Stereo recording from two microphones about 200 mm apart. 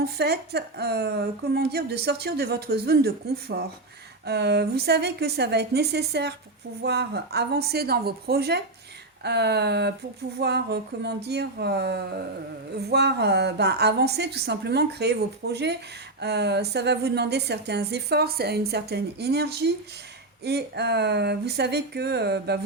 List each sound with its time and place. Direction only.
0.0 s a woman's voice: 55° right (ahead or behind)